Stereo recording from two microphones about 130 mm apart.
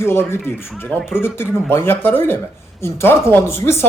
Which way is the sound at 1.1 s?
15° left (ahead or behind).